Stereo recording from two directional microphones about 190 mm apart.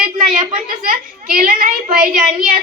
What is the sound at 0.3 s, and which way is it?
A woman's voice, 45° right (ahead or behind).